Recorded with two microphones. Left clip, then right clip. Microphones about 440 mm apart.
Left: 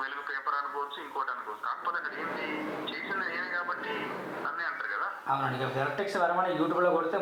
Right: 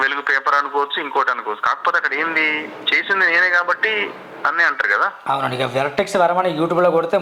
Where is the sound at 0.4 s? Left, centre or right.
Right.